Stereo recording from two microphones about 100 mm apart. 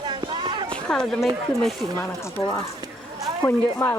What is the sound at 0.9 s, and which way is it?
Speech, 5° left (ahead or behind).